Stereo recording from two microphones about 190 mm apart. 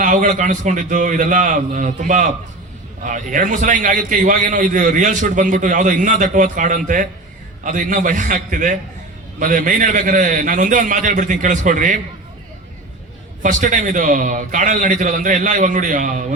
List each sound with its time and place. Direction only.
0.0 s a man's voice: 45° right (ahead or behind)
13.4 s a man's voice: 45° right (ahead or behind)